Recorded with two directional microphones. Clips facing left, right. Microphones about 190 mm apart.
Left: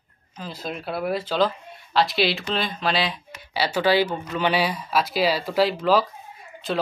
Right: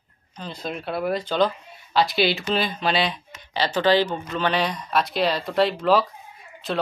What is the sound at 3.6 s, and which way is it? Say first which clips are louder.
Speech: right 1 dB; 10° left (ahead or behind).